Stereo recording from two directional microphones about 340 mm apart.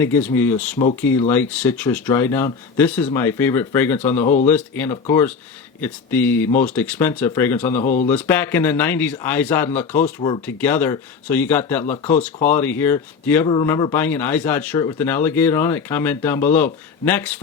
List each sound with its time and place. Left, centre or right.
0.0 s speech: centre
7.8 s speech: left
8.1 s speech: centre